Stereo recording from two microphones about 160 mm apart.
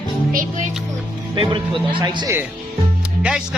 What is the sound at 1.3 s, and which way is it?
Speech, 30° right (ahead or behind).